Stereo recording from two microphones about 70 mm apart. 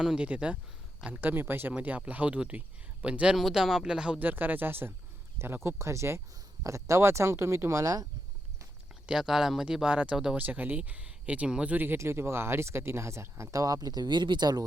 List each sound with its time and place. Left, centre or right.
0.2 s speech: centre
1.2 s speech: right
3.3 s speech: centre
4.2 s speech: right
9.0 s speech: centre; by 11.9 s right
11.9 s speech: right